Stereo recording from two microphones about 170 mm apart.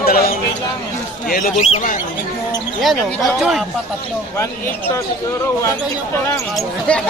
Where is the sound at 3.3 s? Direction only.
Centre (ahead or behind).